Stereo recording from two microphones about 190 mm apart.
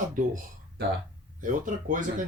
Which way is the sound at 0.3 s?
55° right (ahead or behind).